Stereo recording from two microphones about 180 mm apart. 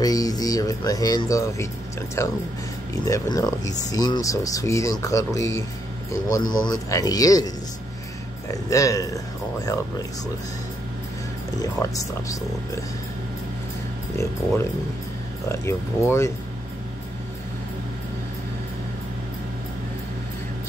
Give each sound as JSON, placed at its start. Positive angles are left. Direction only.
{"t": 0.0, "sound": "speech", "side_deg": 20}
{"t": 11.6, "sound": "speech", "side_deg": 20}
{"t": 15.4, "sound": "speech", "side_deg": 15}